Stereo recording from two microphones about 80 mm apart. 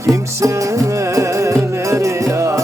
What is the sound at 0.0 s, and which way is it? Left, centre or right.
Music, right.